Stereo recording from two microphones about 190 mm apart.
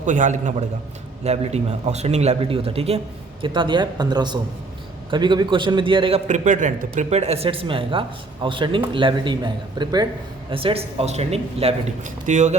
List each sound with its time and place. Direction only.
0.0 s a man's voice: 40° right (ahead or behind)